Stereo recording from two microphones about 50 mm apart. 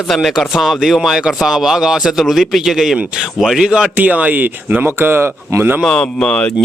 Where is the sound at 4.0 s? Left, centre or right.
Right.